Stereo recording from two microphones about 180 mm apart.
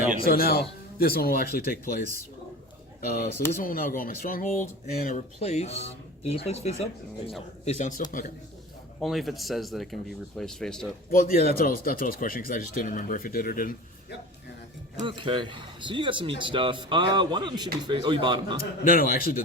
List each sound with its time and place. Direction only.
0.3 s speech: 55° left (ahead or behind)
5.0 s speech: 40° left (ahead or behind)
9.0 s speech: centre (ahead or behind)
11.1 s speech: 50° left (ahead or behind)
15.0 s speech: 25° right (ahead or behind)
18.9 s speech: 55° left (ahead or behind)